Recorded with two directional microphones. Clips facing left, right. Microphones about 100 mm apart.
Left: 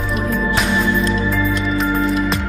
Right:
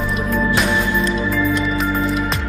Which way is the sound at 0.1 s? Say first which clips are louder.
Left 1 dB; centre (ahead or behind).